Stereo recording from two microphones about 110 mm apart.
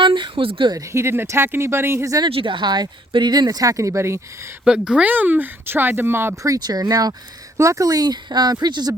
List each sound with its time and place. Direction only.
0.0 s a sound: 50° right (ahead or behind)
0.9 s speech: 20° right (ahead or behind)
2.2 s speech: 50° right (ahead or behind); by 4.2 s 25° right (ahead or behind)
4.6 s speech: 5° right (ahead or behind); by 9.0 s 35° right (ahead or behind)